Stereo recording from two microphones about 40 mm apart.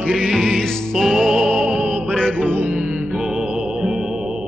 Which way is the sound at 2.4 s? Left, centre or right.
Right.